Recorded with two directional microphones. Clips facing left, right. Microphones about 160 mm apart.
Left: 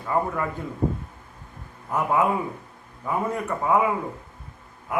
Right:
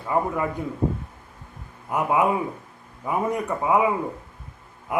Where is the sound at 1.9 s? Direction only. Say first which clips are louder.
Right 1 dB; 10° right (ahead or behind).